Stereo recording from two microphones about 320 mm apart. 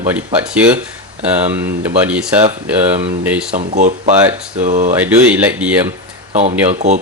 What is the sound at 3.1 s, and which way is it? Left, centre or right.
Speech, right.